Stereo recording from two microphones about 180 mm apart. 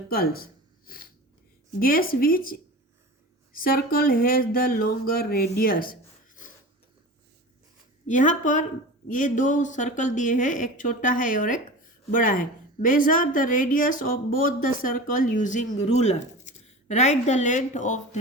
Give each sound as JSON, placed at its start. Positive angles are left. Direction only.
{"t": 0.1, "sound": "speech", "side_deg": 55}
{"t": 1.8, "sound": "a woman's voice", "side_deg": 55}
{"t": 8.0, "sound": "a woman's voice", "side_deg": 45}